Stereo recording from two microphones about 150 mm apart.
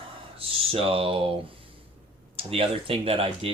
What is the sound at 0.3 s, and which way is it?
Speech, 40° right (ahead or behind).